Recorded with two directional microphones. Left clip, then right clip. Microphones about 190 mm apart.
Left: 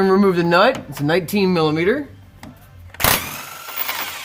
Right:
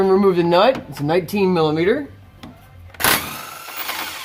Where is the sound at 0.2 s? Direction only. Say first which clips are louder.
Even; 25° left (ahead or behind).